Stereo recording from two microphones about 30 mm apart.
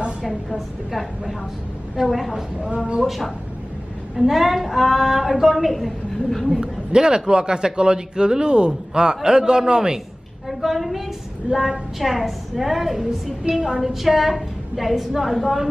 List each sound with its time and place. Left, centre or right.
0.2 s a woman's voice: centre
4.2 s a woman's voice: centre
6.6 s a man's voice: right
10.6 s a woman's voice: centre
12.0 s a woman's voice: centre